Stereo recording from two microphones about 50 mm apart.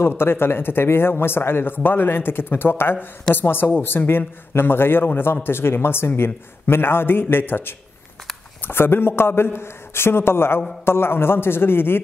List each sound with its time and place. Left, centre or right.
0.2 s a man's voice: left